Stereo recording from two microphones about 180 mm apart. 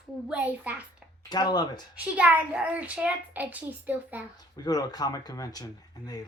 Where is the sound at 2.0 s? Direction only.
5° right (ahead or behind).